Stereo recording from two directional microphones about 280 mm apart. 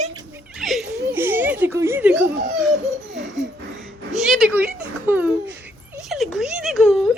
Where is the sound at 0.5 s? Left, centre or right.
Centre.